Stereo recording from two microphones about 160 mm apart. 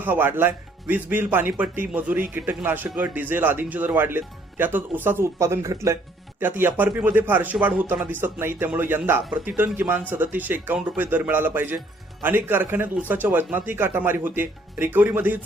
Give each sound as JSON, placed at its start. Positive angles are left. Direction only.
{"t": 0.0, "sound": "a man's voice", "side_deg": -10}